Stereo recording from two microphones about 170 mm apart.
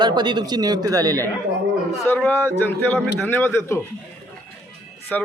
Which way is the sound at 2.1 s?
10° left (ahead or behind).